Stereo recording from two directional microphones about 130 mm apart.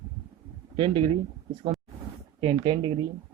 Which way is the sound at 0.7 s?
40° right (ahead or behind).